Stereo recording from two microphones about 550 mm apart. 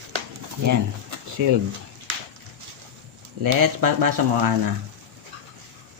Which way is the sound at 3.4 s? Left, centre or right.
Right.